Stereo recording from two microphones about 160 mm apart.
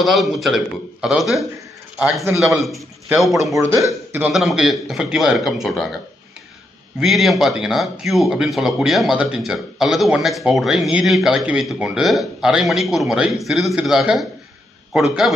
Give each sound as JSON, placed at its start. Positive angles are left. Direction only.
{"t": 0.0, "sound": "speech", "side_deg": 0}
{"t": 3.7, "sound": "speech", "side_deg": -15}
{"t": 4.3, "sound": "speech", "side_deg": 0}
{"t": 7.0, "sound": "speech", "side_deg": 0}